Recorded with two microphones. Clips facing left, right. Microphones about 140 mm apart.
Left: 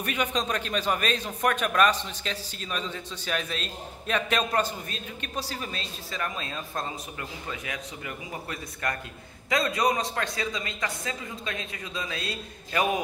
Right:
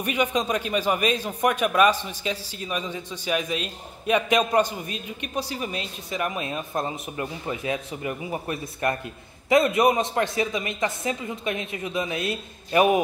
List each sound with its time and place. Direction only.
0.0 s a man's voice: 10° right (ahead or behind)